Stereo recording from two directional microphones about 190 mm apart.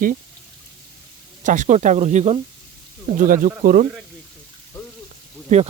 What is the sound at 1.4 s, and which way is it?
Speech, 40° right (ahead or behind).